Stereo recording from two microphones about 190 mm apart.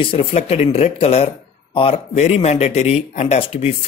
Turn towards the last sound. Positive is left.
turn(degrees=30)  # may be behind; listen again after turning